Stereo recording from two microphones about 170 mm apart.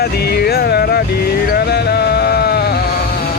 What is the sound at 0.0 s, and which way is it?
Music, 70° left (ahead or behind).